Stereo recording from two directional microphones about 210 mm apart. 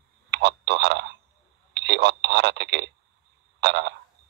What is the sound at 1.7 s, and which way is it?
Telephone, 55° right (ahead or behind).